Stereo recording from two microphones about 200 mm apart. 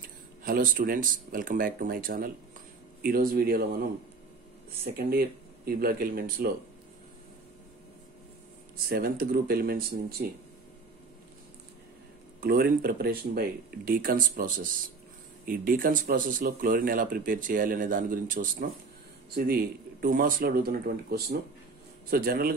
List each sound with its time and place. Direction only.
0.4 s speech: 45° right (ahead or behind)
4.8 s speech: 50° right (ahead or behind)
8.8 s speech: 45° right (ahead or behind)
12.4 s speech: 50° right (ahead or behind)